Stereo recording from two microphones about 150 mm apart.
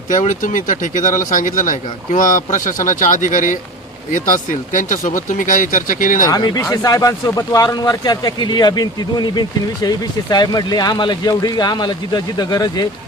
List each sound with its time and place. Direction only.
0.1 s speech: 60° left (ahead or behind)
6.2 s speech: 25° left (ahead or behind)